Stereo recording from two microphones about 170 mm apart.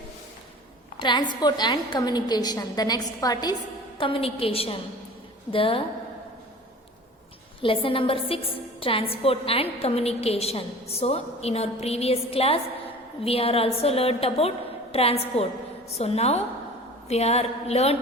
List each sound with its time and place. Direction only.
0.9 s a woman's voice: 25° left (ahead or behind)
7.6 s a woman's voice: 30° left (ahead or behind)